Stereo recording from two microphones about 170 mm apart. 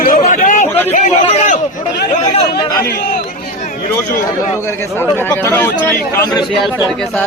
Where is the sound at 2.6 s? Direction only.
25° left (ahead or behind).